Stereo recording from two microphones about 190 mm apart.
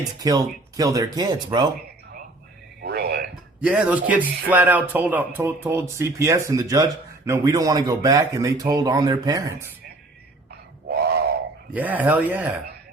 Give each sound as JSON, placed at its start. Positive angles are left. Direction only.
{"t": 0.2, "sound": "speech", "side_deg": -20}
{"t": 2.8, "sound": "a sound", "side_deg": -55}
{"t": 3.6, "sound": "music", "side_deg": -5}
{"t": 10.8, "sound": "grunt", "side_deg": -55}
{"t": 11.7, "sound": "music", "side_deg": -10}